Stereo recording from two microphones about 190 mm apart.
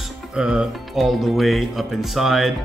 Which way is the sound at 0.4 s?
5° right (ahead or behind).